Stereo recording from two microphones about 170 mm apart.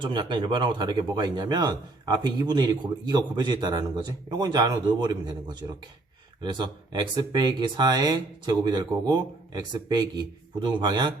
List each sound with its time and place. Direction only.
0.0 s speech: 30° right (ahead or behind)